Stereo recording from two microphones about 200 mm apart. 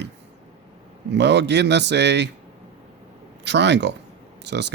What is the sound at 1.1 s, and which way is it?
Speech, 60° right (ahead or behind).